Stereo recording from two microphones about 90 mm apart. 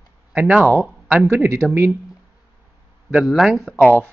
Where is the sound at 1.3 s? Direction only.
30° right (ahead or behind).